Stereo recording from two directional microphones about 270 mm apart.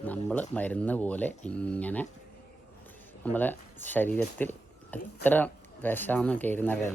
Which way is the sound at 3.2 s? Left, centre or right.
Centre.